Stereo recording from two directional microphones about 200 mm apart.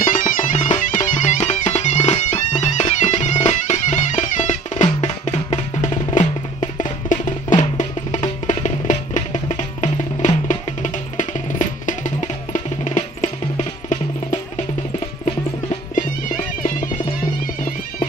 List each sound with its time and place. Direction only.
0.0 s music: 40° left (ahead or behind)
15.7 s music: 40° left (ahead or behind)